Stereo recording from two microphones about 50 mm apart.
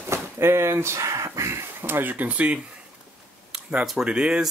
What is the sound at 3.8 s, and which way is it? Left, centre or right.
Speech, centre.